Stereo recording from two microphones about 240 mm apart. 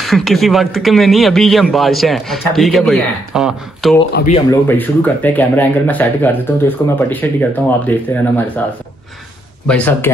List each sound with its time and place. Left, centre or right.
0.0 s speech: centre
4.1 s speech: left
4.5 s speech: centre
9.7 s speech: centre